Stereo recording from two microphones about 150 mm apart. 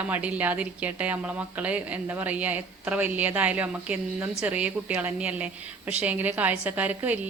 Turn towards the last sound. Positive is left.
turn(degrees=-10)  # may be behind; listen again after turning